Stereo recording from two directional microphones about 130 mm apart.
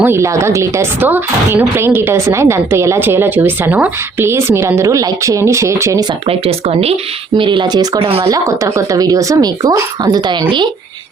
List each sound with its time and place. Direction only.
0.0 s speech: 20° right (ahead or behind)
6.2 s speech: 50° right (ahead or behind)
7.3 s speech: 40° right (ahead or behind)
8.3 s speech: 25° right (ahead or behind)